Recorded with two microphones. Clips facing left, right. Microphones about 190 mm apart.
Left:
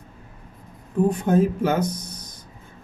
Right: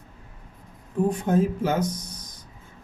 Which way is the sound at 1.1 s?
60° left (ahead or behind).